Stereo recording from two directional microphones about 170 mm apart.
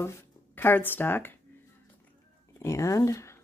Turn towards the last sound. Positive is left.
turn(degrees=15)  # may be behind; listen again after turning